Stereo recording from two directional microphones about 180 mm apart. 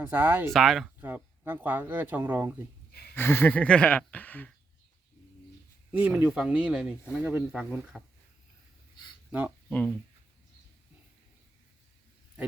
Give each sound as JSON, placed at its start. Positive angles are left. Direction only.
{"t": 0.0, "sound": "speech", "side_deg": -10}
{"t": 0.5, "sound": "speech", "side_deg": 0}
{"t": 1.0, "sound": "speech", "side_deg": -10}
{"t": 2.9, "sound": "a sound", "side_deg": 60}
{"t": 3.2, "sound": "speech", "side_deg": 10}
{"t": 6.0, "sound": "speech", "side_deg": -10}
{"t": 9.6, "sound": "speech", "side_deg": 10}